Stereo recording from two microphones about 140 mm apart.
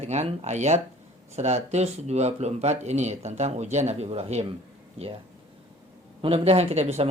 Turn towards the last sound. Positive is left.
turn(degrees=-50)  # may be behind; listen again after turning